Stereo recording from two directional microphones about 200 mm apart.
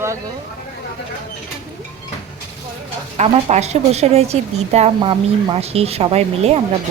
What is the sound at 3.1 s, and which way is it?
A woman's voice, 35° right (ahead or behind).